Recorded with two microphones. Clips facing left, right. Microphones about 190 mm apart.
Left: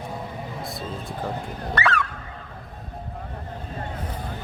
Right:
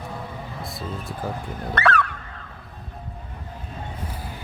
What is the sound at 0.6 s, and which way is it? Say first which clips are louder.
Music: even; centre (ahead or behind).